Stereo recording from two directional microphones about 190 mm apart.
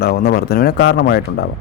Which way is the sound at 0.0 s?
55° left (ahead or behind).